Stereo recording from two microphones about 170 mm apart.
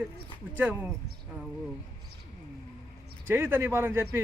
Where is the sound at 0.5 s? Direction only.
10° right (ahead or behind).